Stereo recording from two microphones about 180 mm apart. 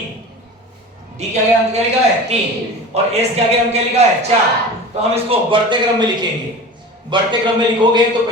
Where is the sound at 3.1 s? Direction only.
35° right (ahead or behind).